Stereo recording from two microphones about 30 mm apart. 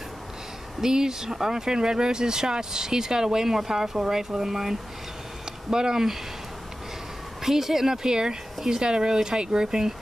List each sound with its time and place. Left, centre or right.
0.7 s speech: centre
7.4 s speech: centre